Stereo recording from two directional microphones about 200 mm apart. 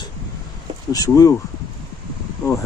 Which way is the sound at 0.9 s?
15° left (ahead or behind).